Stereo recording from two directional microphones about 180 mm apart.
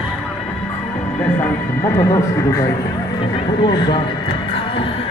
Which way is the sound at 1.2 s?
10° left (ahead or behind).